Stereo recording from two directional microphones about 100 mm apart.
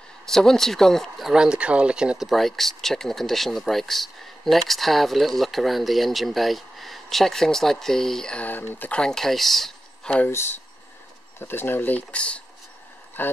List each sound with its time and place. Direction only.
0.3 s speech: 5° left (ahead or behind)
11.3 s speech: 20° left (ahead or behind)